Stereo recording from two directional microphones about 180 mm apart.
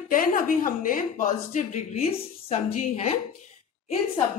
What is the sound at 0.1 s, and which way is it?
Speech, 50° left (ahead or behind).